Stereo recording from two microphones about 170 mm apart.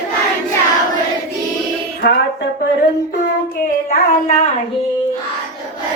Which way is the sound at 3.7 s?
45° left (ahead or behind).